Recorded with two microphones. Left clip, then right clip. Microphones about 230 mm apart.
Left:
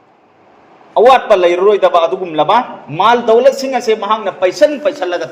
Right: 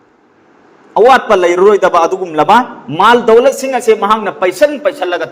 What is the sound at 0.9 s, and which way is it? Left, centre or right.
A man's voice, right.